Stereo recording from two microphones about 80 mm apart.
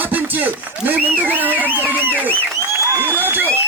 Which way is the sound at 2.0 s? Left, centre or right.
Right.